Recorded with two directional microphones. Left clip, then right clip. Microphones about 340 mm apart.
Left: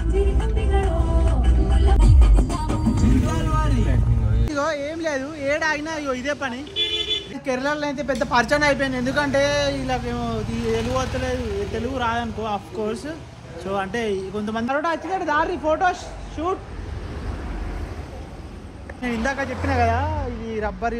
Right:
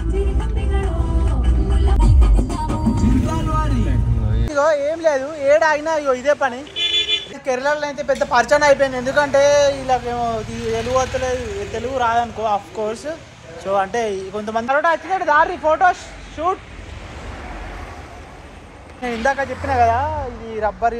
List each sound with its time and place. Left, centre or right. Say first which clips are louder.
0.1 s music: left 1 dB; centre
4.5 s a woman's voice: right 8 dB; centre
18.9 s a woman's voice: right 5 dB; centre